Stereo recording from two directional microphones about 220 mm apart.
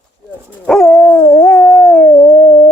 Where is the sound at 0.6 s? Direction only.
Centre (ahead or behind); by 2.7 s 20° left (ahead or behind).